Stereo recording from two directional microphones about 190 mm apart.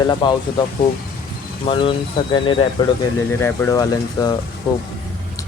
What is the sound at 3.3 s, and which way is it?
Speech, 10° left (ahead or behind).